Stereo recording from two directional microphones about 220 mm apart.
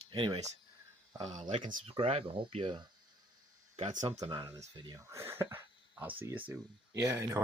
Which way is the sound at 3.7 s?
30° right (ahead or behind).